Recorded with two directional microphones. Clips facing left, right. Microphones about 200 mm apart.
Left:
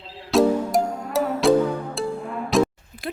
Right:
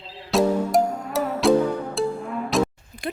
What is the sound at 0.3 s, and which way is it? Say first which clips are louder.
Music: left 2 dB; centre (ahead or behind).